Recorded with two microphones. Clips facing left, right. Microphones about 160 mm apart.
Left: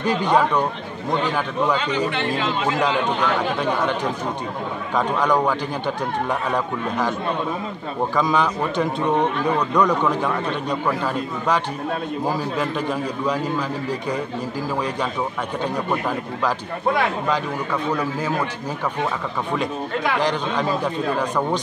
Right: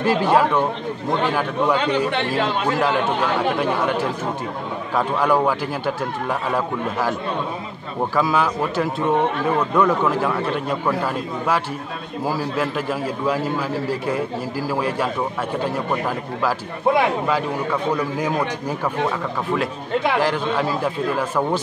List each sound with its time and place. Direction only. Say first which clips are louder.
0.0 s a man's voice: right 2 dB; 5° right (ahead or behind)
2.0 s speech: right 2 dB; 60° right (ahead or behind)
3.6 s a man's voice: right 1 dB; 5° right (ahead or behind)
8.2 s a man's voice: right 1 dB; 5° right (ahead or behind)
12.3 s a man's voice: right 3 dB; 5° right (ahead or behind)
20.2 s a man's voice: right 2 dB; 5° right (ahead or behind)